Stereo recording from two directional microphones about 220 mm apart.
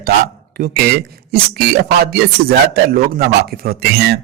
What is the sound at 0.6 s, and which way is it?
A man's voice, 40° right (ahead or behind).